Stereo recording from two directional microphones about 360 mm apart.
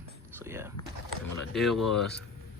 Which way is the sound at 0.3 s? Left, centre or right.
Centre.